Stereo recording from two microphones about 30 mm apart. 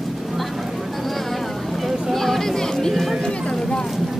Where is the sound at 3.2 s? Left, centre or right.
Left.